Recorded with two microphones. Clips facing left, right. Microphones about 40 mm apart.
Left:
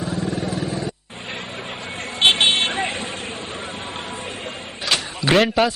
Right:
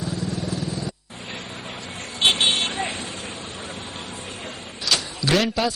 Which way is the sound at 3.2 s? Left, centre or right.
Left.